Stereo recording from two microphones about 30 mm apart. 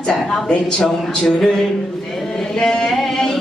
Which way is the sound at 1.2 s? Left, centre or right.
Centre.